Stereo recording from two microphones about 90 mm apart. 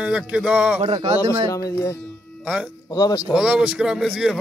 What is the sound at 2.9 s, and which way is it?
Speech, 50° left (ahead or behind).